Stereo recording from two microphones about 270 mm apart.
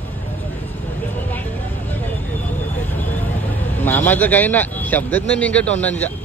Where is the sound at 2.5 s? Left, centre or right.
Left.